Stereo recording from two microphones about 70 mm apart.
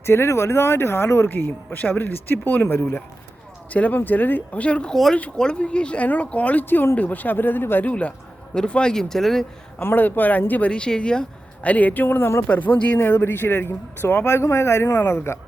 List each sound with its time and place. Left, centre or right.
0.0 s speech: left
1.3 s speech: left
7.9 s a man's voice: centre
9.8 s speech: left
10.7 s speech: centre; by 12.5 s left
12.5 s speech: left